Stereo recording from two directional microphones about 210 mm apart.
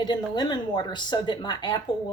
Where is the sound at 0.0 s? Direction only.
20° left (ahead or behind).